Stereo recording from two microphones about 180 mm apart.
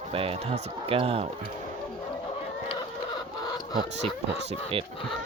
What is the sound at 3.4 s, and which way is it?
Chicken, 20° left (ahead or behind).